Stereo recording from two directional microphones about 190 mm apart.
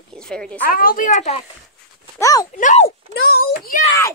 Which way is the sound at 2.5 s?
40° left (ahead or behind).